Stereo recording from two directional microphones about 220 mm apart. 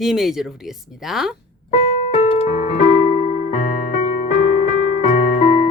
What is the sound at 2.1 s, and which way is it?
Keyboard, 30° left (ahead or behind).